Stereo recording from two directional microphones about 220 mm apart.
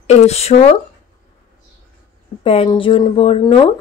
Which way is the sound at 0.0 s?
30° left (ahead or behind).